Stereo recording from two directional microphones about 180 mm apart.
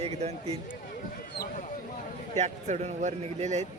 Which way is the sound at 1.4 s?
45° left (ahead or behind).